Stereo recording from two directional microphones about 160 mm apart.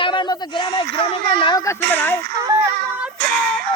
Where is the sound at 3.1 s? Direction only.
70° right (ahead or behind).